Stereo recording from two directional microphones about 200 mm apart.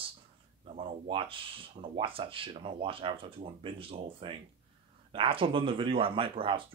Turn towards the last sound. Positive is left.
turn(degrees=-25)  # may be behind; listen again after turning